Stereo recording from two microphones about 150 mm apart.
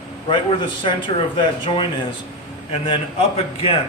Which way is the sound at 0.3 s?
35° left (ahead or behind).